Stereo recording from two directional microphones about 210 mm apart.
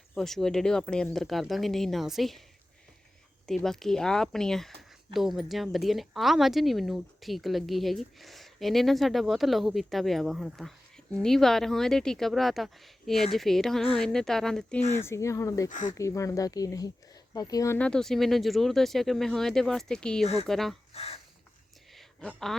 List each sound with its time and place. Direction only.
0.1 s speech: centre (ahead or behind)
3.4 s speech: centre (ahead or behind)
14.9 s speech: 10° left (ahead or behind)
15.7 s speech: 35° left (ahead or behind)
16.0 s speech: 15° left (ahead or behind)
20.2 s speech: 30° left (ahead or behind)
20.5 s speech: centre (ahead or behind)
20.9 s speech: 30° left (ahead or behind)
21.9 s a sound: 5° left (ahead or behind)